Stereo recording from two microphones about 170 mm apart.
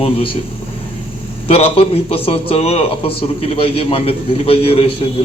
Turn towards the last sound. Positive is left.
turn(degrees=35)  # may be behind; listen again after turning